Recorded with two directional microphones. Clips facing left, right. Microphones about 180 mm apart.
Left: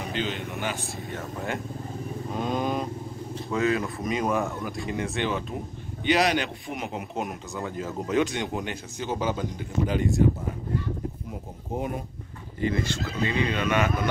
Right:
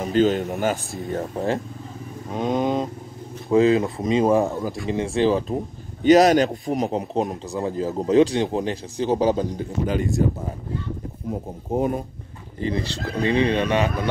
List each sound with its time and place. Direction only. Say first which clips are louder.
0.0 s a man's voice: right 11 dB; 45° right (ahead or behind)
2.3 s a man's voice: right 6 dB; 20° right (ahead or behind); by 10.2 s 40° right (ahead or behind)
12.5 s a man's voice: right 1 dB; 35° right (ahead or behind)